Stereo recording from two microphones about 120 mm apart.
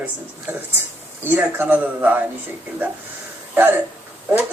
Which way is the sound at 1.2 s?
15° right (ahead or behind).